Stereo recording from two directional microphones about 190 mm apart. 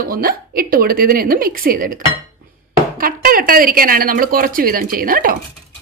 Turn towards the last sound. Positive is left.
turn(degrees=-45)  # may be behind; listen again after turning